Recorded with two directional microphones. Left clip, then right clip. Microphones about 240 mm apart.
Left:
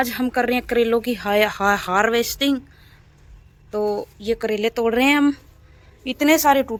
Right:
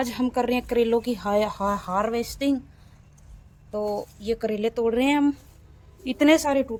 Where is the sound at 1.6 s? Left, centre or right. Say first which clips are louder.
Left 7 dB; left.